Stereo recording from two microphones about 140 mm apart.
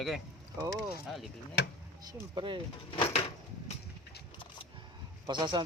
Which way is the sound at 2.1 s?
35° right (ahead or behind).